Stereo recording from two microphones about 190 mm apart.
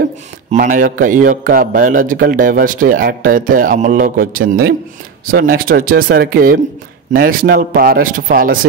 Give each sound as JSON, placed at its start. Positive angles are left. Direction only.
{"t": 0.5, "sound": "a man's voice", "side_deg": -45}